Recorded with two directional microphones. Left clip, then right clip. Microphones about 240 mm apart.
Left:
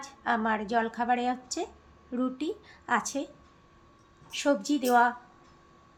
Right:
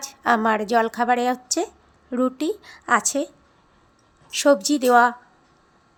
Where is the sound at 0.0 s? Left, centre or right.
Right.